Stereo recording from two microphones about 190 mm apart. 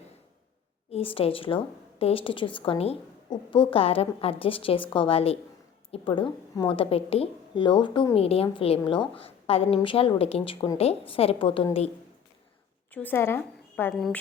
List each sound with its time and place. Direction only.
0.9 s a woman's voice: 30° left (ahead or behind)
12.9 s a woman's voice: 10° left (ahead or behind)
13.9 s a woman's voice: centre (ahead or behind)